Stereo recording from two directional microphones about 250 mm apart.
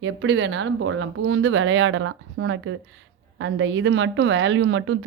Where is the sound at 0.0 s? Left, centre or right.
Right.